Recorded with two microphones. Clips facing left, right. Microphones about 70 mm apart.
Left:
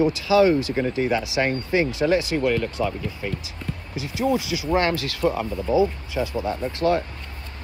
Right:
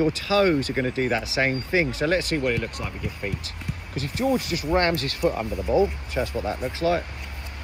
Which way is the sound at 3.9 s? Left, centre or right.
Right.